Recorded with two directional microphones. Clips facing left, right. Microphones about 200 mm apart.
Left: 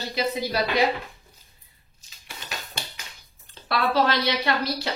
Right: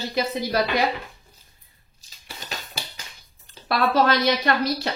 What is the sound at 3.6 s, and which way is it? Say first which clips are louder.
A woman's voice: right 2 dB; 45° right (ahead or behind).